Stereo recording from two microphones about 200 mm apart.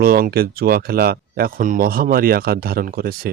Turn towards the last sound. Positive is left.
turn(degrees=-45)  # may be behind; listen again after turning